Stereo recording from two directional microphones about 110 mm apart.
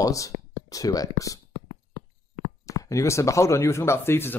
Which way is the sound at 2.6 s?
30° left (ahead or behind).